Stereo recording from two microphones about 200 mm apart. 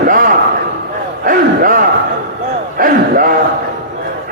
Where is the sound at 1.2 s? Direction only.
45° right (ahead or behind).